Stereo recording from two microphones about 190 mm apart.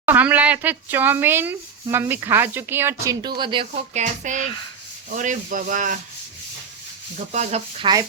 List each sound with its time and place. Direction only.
0.0 s speech: 10° right (ahead or behind); by 4.4 s 40° right (ahead or behind)
5.1 s rub: 40° right (ahead or behind)
7.3 s sizzle: 35° right (ahead or behind)